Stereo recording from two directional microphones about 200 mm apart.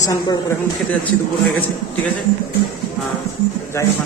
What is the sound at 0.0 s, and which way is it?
Speech, 20° left (ahead or behind).